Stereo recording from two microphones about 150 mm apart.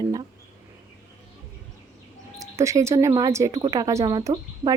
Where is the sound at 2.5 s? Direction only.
20° right (ahead or behind).